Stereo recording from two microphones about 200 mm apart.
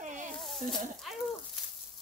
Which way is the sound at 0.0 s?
40° right (ahead or behind).